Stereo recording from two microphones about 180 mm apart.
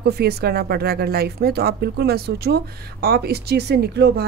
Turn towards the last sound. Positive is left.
turn(degrees=-65)  # may be behind; listen again after turning